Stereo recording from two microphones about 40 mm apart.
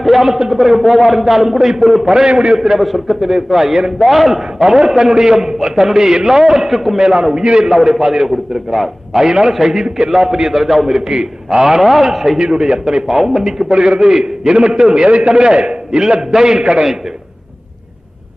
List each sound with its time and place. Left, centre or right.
0.0 s a man's voice: centre
2.2 s a man's voice: right
2.7 s a man's voice: centre
4.6 s a man's voice: centre
7.0 s a man's voice: centre
7.6 s a man's voice: centre
9.1 s a man's voice: centre
12.4 s a man's voice: centre
13.7 s a man's voice: right